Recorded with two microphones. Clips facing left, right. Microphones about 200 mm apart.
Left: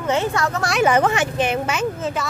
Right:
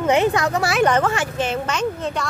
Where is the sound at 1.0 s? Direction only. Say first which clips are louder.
Left 2 dB; 20° left (ahead or behind).